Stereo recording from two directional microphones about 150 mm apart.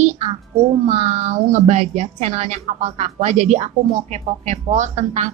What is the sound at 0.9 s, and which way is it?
A woman's voice, 45° right (ahead or behind).